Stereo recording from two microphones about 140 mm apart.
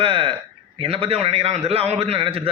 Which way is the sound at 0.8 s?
40° right (ahead or behind).